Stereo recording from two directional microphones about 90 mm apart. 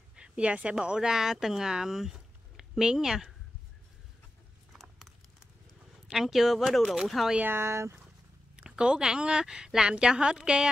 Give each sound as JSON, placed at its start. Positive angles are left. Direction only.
{"t": 0.1, "sound": "speech", "side_deg": -10}
{"t": 4.9, "sound": "a sound", "side_deg": 0}
{"t": 6.0, "sound": "speech", "side_deg": -5}
{"t": 7.3, "sound": "speech", "side_deg": -25}
{"t": 8.5, "sound": "a woman's voice", "side_deg": -10}